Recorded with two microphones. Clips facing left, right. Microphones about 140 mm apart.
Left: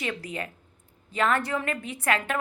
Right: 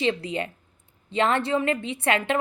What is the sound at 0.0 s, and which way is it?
A woman's voice, 25° right (ahead or behind).